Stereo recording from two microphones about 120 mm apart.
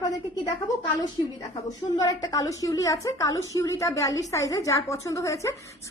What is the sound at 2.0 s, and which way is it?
A woman's voice, 30° left (ahead or behind).